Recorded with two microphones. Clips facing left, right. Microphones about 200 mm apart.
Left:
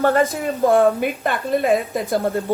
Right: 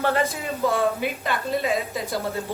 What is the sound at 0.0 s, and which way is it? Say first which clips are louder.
A woman's voice: left 6 dB; 50° left (ahead or behind).